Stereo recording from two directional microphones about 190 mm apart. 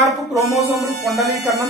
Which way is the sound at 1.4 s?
15° right (ahead or behind).